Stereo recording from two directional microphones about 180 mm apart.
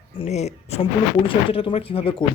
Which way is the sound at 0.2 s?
40° left (ahead or behind).